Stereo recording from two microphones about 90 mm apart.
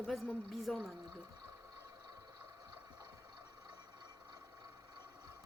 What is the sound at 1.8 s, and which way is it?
Vehicle, 45° right (ahead or behind).